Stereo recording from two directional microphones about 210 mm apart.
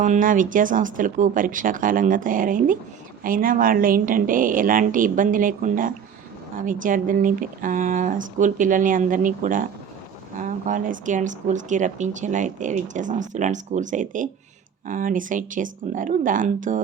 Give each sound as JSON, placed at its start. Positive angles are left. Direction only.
{"t": 0.0, "sound": "speech", "side_deg": -40}